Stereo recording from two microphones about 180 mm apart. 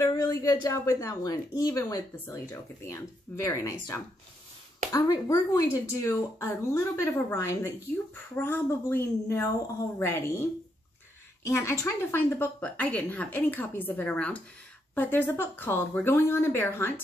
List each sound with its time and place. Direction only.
0.1 s speech: 20° left (ahead or behind)
11.4 s speech: 15° left (ahead or behind)